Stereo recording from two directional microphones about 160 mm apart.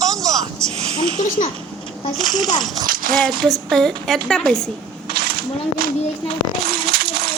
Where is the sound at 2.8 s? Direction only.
60° right (ahead or behind).